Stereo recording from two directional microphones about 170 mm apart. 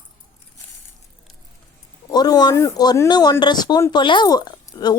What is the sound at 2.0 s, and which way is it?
A woman's voice, 20° left (ahead or behind).